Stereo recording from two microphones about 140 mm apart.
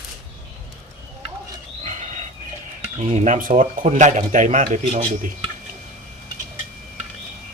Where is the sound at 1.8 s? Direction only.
55° right (ahead or behind).